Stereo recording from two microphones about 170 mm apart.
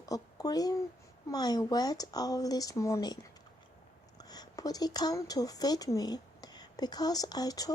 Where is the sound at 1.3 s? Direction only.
25° left (ahead or behind).